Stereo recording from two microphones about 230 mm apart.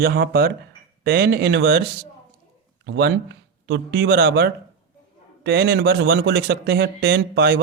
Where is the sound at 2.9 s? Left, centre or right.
Right.